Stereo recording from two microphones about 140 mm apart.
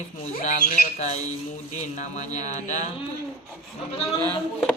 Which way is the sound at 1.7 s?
60° left (ahead or behind).